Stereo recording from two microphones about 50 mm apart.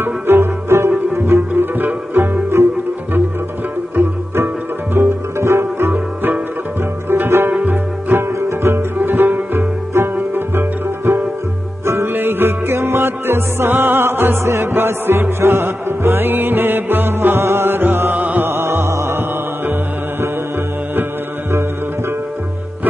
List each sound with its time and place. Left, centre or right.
0.0 s music: right
1.5 s music: right
2.5 s music: right
3.9 s music: right
5.4 s music: right
7.1 s sitar: right
8.2 s music: right
8.9 s music: right
9.9 s music: right
11.1 s music: right
11.8 s music: right
12.1 s music: right
18.4 s music: right
18.9 s music: right